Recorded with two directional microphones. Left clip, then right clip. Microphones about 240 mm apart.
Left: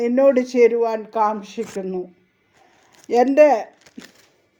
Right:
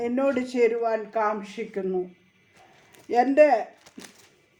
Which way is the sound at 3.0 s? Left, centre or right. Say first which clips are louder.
Left 5 dB; left.